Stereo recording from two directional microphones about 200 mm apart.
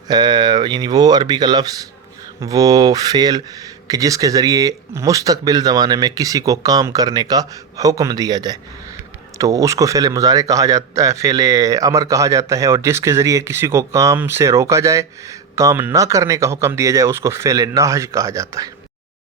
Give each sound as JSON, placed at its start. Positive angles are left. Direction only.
{"t": 0.1, "sound": "speech", "side_deg": -20}